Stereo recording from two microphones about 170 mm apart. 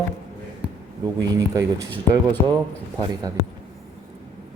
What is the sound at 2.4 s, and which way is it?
Speech, 20° left (ahead or behind).